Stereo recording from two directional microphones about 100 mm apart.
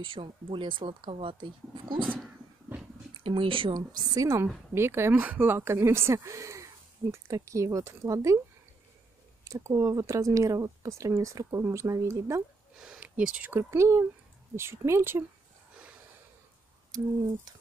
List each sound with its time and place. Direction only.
0.0 s speech: 55° right (ahead or behind)
3.3 s speech: 60° right (ahead or behind)
3.7 s speech: 40° right (ahead or behind)
9.4 s speech: 30° right (ahead or behind)
12.7 s a sound: 5° right (ahead or behind)
13.5 s speech: 30° right (ahead or behind)